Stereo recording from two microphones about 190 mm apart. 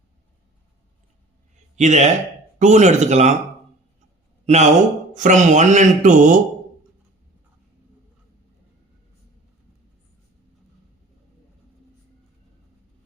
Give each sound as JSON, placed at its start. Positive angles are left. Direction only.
{"t": 1.7, "sound": "a man's voice", "side_deg": -35}
{"t": 4.4, "sound": "speech", "side_deg": -35}